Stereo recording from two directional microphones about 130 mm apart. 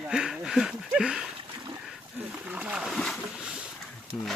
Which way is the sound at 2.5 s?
10° right (ahead or behind).